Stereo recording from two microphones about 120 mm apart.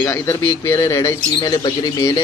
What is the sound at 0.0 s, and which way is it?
Speech, 20° left (ahead or behind).